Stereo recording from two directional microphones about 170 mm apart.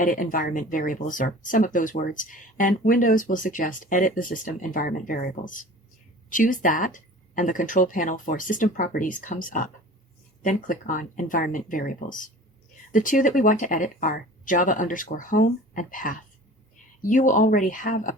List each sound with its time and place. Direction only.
0.0 s speech: 50° left (ahead or behind)